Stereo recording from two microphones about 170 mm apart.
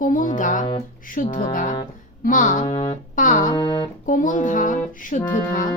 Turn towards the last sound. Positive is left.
turn(degrees=50)  # may be behind; listen again after turning